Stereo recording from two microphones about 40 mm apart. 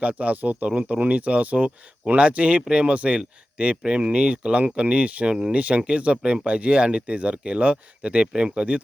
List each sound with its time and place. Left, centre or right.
0.0 s speech: right